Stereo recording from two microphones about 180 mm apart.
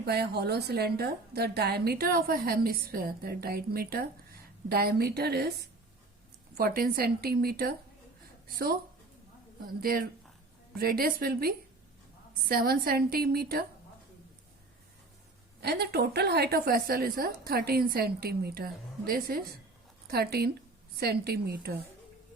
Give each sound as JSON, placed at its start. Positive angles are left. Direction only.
{"t": 0.0, "sound": "a woman's voice", "side_deg": -65}
{"t": 9.8, "sound": "a woman's voice", "side_deg": -55}
{"t": 15.6, "sound": "a woman's voice", "side_deg": -65}